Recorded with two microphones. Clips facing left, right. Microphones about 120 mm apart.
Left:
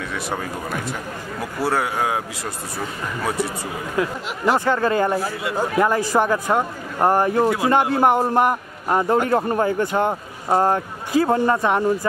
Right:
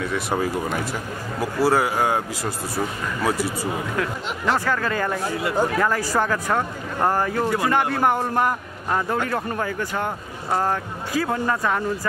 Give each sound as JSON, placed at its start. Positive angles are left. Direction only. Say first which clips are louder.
{"t": 0.0, "sound": "a man's voice", "louder": "right 3 dB", "side_deg": 0}
{"t": 4.6, "sound": "speech", "louder": "left 5 dB", "side_deg": 25}
{"t": 5.2, "sound": "a man's voice", "louder": "right 1 dB", "side_deg": 0}
{"t": 5.8, "sound": "speech", "louder": "left 3 dB", "side_deg": 20}
{"t": 7.4, "sound": "a man's voice", "louder": "left 3 dB", "side_deg": 0}
{"t": 7.9, "sound": "speech", "louder": "left 4 dB", "side_deg": 25}